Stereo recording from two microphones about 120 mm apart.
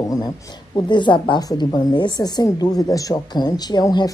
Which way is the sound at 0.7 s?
40° left (ahead or behind).